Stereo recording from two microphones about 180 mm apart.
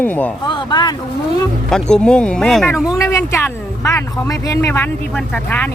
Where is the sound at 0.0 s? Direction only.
10° left (ahead or behind).